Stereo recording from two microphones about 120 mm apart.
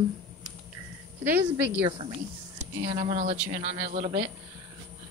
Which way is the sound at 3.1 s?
70° right (ahead or behind).